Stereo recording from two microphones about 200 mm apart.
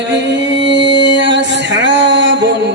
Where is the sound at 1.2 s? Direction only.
65° right (ahead or behind).